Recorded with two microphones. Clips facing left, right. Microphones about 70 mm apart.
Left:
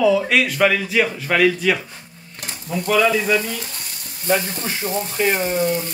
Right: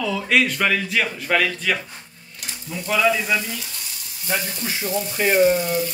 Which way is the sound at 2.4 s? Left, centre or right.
Left.